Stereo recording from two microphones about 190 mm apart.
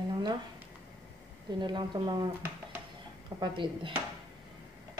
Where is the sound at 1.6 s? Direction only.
20° right (ahead or behind).